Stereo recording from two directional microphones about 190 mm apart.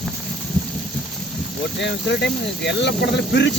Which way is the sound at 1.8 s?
65° left (ahead or behind).